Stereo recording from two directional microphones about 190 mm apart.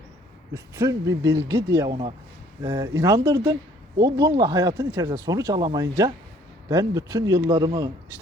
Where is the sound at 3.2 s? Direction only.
20° right (ahead or behind).